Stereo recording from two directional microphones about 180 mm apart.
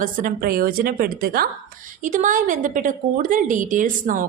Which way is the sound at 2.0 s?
45° right (ahead or behind).